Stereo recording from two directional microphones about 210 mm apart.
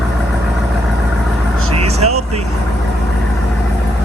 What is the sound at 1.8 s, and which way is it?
Vehicle, 30° right (ahead or behind).